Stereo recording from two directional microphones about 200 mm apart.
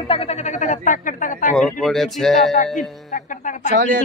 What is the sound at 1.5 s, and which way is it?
Speech, centre (ahead or behind).